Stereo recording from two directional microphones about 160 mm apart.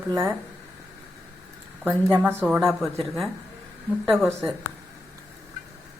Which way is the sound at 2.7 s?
Centre (ahead or behind).